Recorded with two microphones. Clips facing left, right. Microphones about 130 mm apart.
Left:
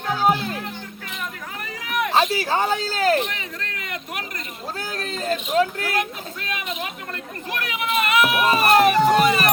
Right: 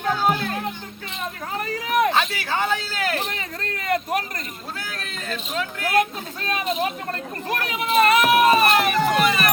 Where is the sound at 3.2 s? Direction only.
40° right (ahead or behind).